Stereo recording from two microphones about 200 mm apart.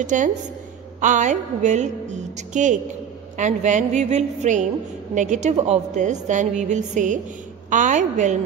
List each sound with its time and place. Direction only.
0.0 s a woman's voice: 40° right (ahead or behind)